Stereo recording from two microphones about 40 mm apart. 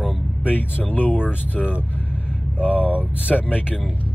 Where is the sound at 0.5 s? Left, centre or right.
Left.